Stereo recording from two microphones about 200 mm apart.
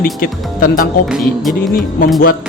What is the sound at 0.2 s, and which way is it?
Speech, 45° left (ahead or behind).